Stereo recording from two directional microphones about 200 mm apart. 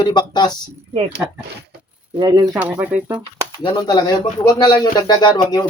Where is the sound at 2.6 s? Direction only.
5° right (ahead or behind).